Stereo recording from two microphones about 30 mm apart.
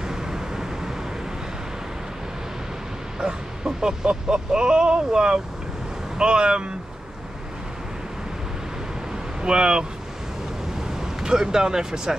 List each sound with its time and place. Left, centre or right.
0.0 s vehicle: centre
3.2 s speech: right
9.4 s speech: right
10.8 s speech: centre